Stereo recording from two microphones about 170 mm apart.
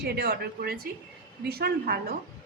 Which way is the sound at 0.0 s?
65° right (ahead or behind).